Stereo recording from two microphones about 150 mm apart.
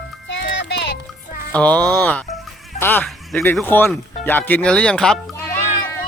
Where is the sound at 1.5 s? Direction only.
10° left (ahead or behind).